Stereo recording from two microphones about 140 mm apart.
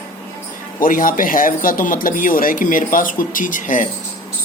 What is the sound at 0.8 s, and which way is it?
Speech, 75° left (ahead or behind).